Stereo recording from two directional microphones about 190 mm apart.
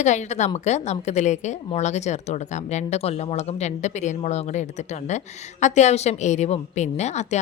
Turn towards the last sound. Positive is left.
turn(degrees=35)  # may be behind; listen again after turning